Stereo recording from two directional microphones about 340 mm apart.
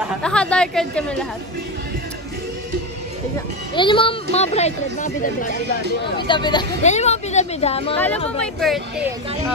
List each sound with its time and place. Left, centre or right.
0.2 s speech: centre
3.7 s speech: centre
8.4 s speech: centre